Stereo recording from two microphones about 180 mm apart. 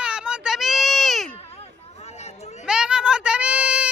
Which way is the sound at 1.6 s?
35° left (ahead or behind).